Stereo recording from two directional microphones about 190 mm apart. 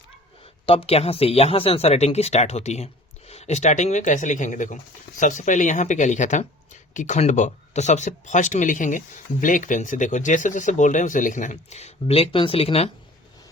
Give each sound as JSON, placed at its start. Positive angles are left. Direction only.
{"t": 0.6, "sound": "speech", "side_deg": 30}